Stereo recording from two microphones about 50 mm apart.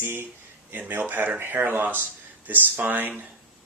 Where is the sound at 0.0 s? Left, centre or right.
Right.